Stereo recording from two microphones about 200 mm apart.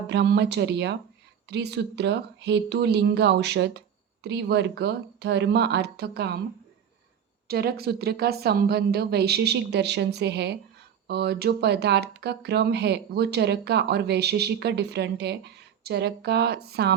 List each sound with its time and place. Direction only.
0.1 s speech: 60° right (ahead or behind)
7.4 s speech: 50° right (ahead or behind)